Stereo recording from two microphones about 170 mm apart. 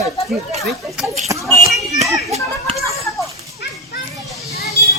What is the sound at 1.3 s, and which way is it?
Speech, 20° right (ahead or behind).